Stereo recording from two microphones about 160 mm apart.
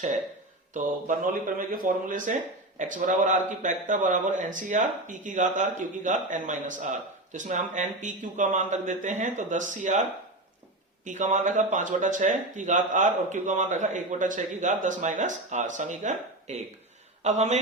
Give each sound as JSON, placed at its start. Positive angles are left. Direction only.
{"t": 0.7, "sound": "a man's voice", "side_deg": -55}